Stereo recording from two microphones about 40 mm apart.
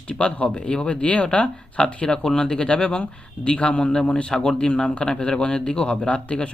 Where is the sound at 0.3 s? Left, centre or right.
Left.